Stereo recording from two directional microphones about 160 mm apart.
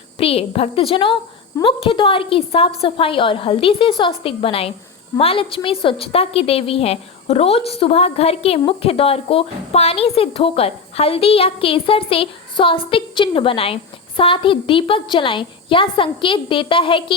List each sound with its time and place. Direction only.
0.2 s a woman's voice: 35° left (ahead or behind)